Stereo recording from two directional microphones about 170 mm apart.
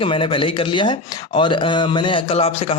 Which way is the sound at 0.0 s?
30° left (ahead or behind).